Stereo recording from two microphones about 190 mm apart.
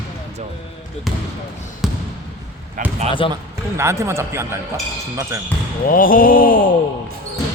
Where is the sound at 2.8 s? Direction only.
45° right (ahead or behind).